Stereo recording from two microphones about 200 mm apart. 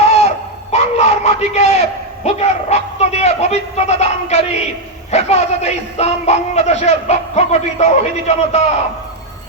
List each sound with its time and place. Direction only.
0.0 s speech: 35° left (ahead or behind)